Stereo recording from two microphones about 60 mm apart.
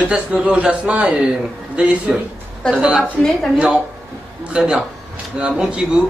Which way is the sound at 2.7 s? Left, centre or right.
Centre.